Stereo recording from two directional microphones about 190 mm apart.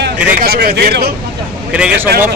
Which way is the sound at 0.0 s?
55° right (ahead or behind).